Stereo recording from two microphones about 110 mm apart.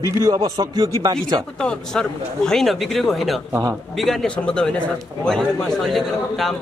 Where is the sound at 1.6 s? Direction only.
5° left (ahead or behind).